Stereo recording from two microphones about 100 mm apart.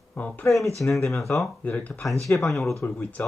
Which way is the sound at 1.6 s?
15° left (ahead or behind).